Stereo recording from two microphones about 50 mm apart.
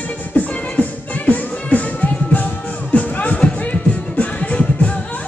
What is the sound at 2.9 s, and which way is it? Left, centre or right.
Music, left.